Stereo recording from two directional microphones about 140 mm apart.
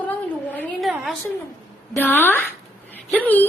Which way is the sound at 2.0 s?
15° left (ahead or behind).